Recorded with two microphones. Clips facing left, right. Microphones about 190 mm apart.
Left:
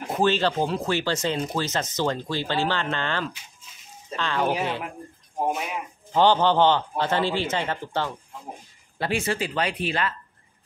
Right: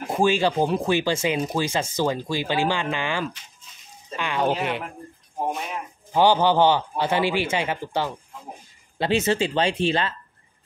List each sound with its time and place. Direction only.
0.1 s speech: 10° right (ahead or behind)
6.1 s speech: 10° right (ahead or behind)
8.9 s speech: 20° right (ahead or behind)